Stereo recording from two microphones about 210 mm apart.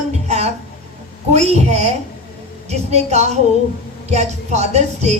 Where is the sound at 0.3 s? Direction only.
30° right (ahead or behind).